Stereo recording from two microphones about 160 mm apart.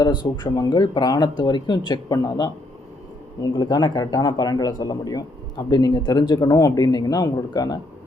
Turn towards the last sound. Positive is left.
turn(degrees=25)  # may be behind; listen again after turning